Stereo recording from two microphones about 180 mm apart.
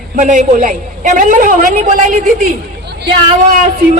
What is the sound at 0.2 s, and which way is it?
Speech, 45° right (ahead or behind).